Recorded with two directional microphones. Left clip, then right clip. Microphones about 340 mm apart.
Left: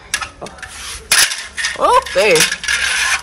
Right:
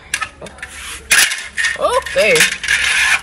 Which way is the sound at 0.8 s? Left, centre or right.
Centre.